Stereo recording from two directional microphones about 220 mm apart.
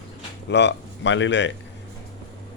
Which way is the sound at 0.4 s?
50° left (ahead or behind).